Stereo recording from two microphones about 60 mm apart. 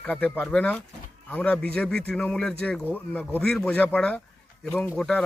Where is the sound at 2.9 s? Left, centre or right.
Left.